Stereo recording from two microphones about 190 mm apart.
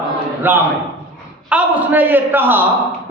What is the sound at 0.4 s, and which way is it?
A man's voice, 10° right (ahead or behind).